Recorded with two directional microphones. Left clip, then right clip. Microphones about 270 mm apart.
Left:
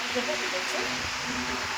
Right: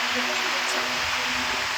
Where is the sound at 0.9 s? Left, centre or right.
Right.